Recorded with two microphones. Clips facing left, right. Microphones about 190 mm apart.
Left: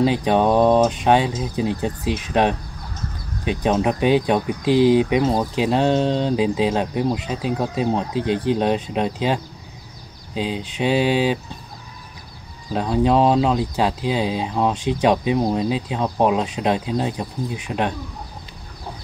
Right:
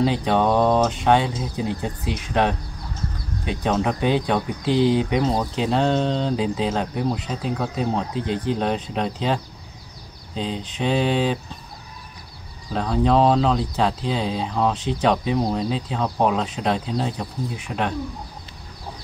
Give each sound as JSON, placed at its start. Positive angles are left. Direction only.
{"t": 0.0, "sound": "speech", "side_deg": 15}
{"t": 12.7, "sound": "speech", "side_deg": 15}